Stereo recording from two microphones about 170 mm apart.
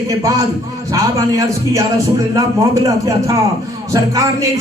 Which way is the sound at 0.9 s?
20° right (ahead or behind).